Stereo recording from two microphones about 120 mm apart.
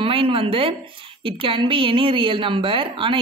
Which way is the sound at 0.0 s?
50° right (ahead or behind).